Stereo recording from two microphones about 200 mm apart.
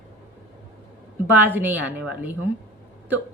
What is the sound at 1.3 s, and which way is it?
A woman's voice, 10° right (ahead or behind).